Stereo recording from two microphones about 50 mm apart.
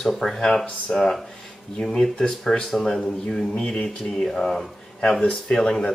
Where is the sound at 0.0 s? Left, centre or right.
Centre.